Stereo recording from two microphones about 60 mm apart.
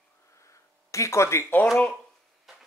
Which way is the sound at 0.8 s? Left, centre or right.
Left.